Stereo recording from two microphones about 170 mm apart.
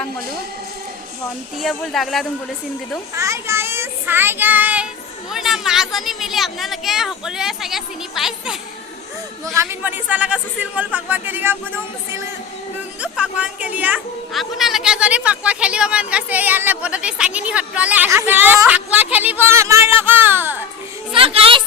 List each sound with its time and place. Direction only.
1.6 s speech: centre (ahead or behind)
3.2 s child singing: 15° right (ahead or behind)
5.3 s speech: centre (ahead or behind)
9.6 s speech: 10° right (ahead or behind)
21.1 s speech: 30° right (ahead or behind)